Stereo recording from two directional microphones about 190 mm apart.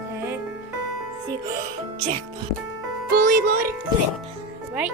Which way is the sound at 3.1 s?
55° right (ahead or behind).